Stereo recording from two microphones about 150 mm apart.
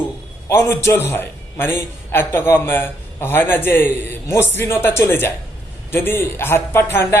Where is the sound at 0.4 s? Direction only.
20° left (ahead or behind).